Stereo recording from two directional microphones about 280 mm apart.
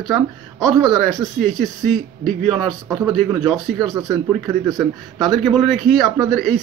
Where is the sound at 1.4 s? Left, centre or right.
Centre.